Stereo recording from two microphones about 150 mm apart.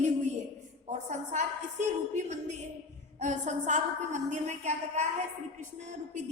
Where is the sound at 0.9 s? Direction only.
55° right (ahead or behind).